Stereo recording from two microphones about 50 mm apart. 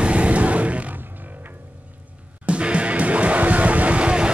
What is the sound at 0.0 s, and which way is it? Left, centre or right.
Music, right.